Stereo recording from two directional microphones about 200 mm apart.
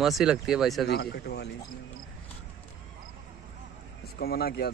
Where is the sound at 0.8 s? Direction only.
55° left (ahead or behind).